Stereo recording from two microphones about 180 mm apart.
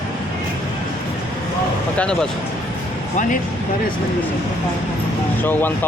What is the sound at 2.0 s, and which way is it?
Speech, 5° left (ahead or behind).